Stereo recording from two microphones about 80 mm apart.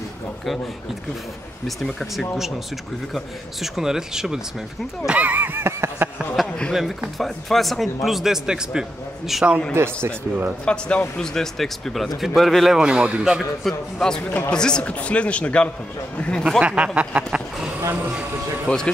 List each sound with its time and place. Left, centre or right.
2.0 s a man's voice: centre
3.6 s a man's voice: centre
5.0 s a sound: centre
6.4 s a sound: centre
7.2 s a man's voice: centre
10.6 s a man's voice: centre
13.7 s a man's voice: centre
16.4 s speech: centre
18.7 s a man's voice: centre